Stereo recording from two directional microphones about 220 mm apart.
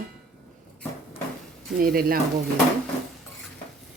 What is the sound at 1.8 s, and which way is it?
Speech, 40° right (ahead or behind).